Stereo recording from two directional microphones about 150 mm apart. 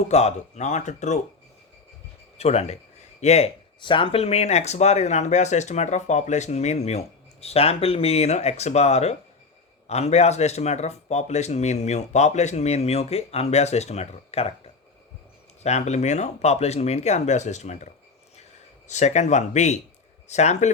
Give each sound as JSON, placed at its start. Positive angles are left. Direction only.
{"t": 0.1, "sound": "speech", "side_deg": 45}
{"t": 2.4, "sound": "speech", "side_deg": 45}
{"t": 3.8, "sound": "speech", "side_deg": 35}